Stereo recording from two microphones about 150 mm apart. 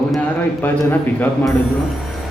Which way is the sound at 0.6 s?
10° left (ahead or behind).